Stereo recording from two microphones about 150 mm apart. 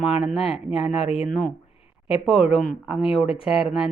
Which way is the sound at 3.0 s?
40° left (ahead or behind).